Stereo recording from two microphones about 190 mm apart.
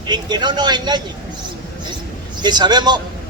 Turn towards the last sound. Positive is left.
turn(degrees=-20)  # may be behind; listen again after turning